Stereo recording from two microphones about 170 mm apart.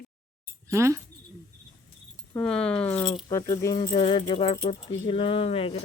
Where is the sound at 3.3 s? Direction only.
20° left (ahead or behind).